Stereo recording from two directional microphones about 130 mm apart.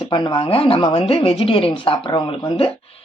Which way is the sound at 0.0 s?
40° left (ahead or behind).